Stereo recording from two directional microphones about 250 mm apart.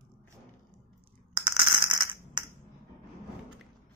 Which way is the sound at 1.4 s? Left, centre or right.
Centre.